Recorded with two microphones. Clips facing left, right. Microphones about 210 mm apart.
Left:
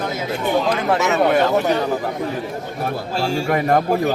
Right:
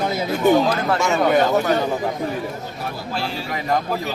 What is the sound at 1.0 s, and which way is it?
Speech, 5° left (ahead or behind).